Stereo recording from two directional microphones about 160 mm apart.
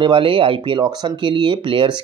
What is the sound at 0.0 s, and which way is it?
Speech, 30° right (ahead or behind).